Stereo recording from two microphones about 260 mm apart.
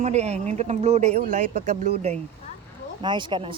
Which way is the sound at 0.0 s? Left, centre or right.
Right.